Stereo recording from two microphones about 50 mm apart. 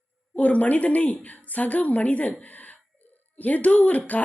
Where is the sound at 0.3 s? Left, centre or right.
Left.